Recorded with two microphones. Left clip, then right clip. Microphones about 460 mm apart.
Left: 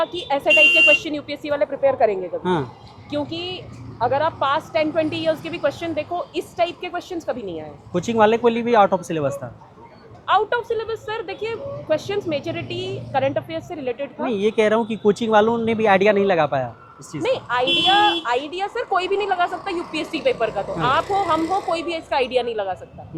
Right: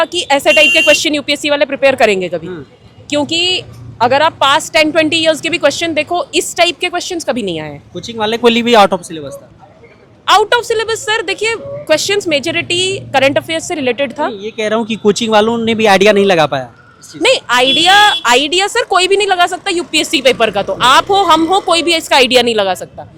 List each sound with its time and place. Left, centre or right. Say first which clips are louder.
0.0 s a woman's voice: right 10 dB; right
7.9 s speech: left 4 dB; left
8.4 s speech: right 8 dB; centre
9.0 s speech: left 3 dB; centre
10.2 s a woman's voice: right 9 dB; right
14.5 s speech: right 3 dB; centre
17.2 s a woman's voice: right 10 dB; right